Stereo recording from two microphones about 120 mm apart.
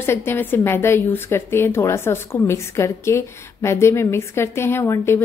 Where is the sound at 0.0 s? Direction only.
20° left (ahead or behind).